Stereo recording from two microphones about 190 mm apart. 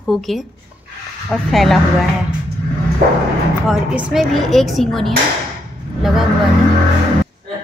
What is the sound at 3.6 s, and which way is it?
Speech, centre (ahead or behind).